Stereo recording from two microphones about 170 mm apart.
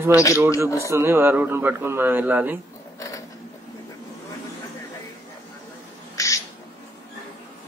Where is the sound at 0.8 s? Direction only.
15° right (ahead or behind).